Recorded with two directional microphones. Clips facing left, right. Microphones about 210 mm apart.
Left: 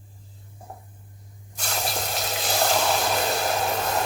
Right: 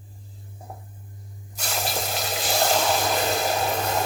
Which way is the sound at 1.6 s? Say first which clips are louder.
Right 1 dB; centre (ahead or behind).